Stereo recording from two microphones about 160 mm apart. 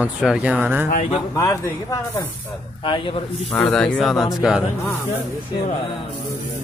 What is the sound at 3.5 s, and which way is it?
Speech, 5° left (ahead or behind).